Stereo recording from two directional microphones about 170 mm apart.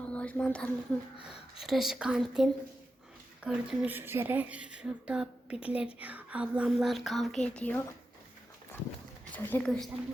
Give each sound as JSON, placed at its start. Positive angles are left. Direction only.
{"t": 0.1, "sound": "speech", "side_deg": 10}
{"t": 1.6, "sound": "a woman's voice", "side_deg": 0}
{"t": 9.3, "sound": "speech", "side_deg": 10}